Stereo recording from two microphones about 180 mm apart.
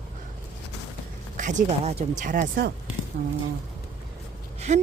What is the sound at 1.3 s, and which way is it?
Speech, 40° right (ahead or behind).